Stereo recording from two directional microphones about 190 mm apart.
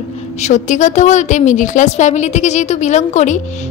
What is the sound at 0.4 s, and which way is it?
A woman's voice, 40° left (ahead or behind).